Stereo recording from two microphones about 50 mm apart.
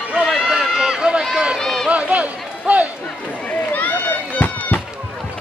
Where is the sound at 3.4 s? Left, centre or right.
Left.